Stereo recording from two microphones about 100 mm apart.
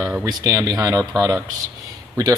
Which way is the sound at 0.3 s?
40° right (ahead or behind).